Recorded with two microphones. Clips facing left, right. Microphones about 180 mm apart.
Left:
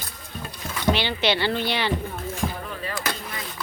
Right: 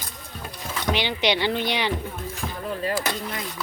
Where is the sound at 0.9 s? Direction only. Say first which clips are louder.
Left 1 dB; 15° right (ahead or behind).